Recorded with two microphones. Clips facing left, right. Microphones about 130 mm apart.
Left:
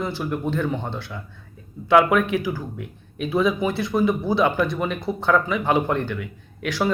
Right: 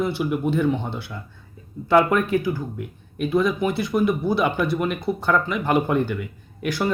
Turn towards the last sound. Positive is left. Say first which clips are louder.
# right 2 dB
turn(degrees=-5)  # may be behind; listen again after turning